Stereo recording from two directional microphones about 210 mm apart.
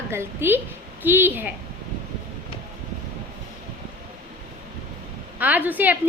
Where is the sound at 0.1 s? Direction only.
10° right (ahead or behind).